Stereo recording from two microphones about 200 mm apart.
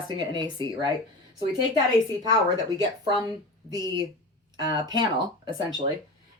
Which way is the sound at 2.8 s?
20° right (ahead or behind).